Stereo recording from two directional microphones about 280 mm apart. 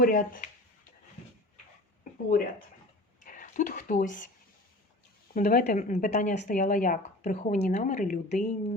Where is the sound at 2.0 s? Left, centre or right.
Left.